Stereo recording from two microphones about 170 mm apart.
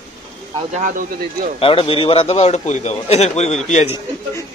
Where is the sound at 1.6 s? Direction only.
35° left (ahead or behind).